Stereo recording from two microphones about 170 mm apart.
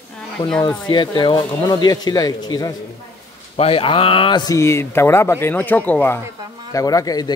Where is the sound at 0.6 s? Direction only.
25° left (ahead or behind).